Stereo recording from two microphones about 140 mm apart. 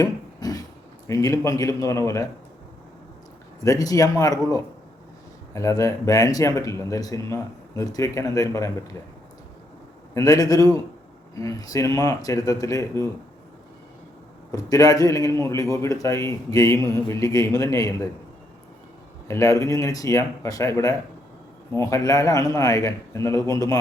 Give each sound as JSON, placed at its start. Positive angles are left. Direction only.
{"t": 0.0, "sound": "a sound", "side_deg": 25}
{"t": 1.0, "sound": "a man's voice", "side_deg": 25}
{"t": 3.6, "sound": "a man's voice", "side_deg": 25}
{"t": 10.2, "sound": "a man's voice", "side_deg": 25}
{"t": 14.5, "sound": "a man's voice", "side_deg": 25}
{"t": 19.3, "sound": "a man's voice", "side_deg": 20}